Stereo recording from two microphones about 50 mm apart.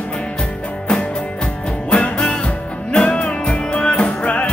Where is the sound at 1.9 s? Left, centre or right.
Left.